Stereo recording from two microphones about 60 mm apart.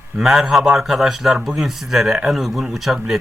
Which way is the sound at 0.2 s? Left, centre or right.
Centre.